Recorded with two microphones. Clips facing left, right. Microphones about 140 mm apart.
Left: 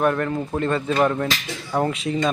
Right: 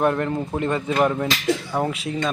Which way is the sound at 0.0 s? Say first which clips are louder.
Even; 25° right (ahead or behind).